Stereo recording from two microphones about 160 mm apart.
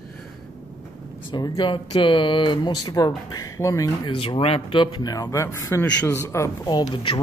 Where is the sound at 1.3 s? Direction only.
25° left (ahead or behind).